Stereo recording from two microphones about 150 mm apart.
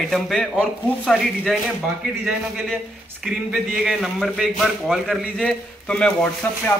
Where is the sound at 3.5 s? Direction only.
Centre (ahead or behind).